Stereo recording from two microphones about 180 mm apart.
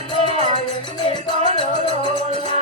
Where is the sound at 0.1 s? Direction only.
25° left (ahead or behind).